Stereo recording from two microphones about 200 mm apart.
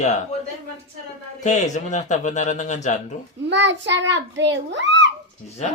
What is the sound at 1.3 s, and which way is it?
A man's voice, 35° left (ahead or behind).